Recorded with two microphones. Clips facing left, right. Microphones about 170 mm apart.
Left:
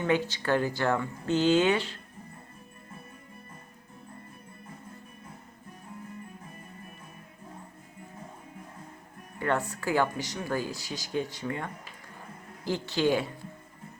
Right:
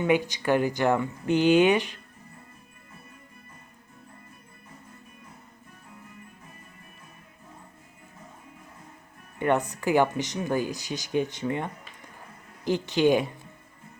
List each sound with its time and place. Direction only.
0.0 s speech: 15° right (ahead or behind)
9.4 s speech: 20° right (ahead or behind)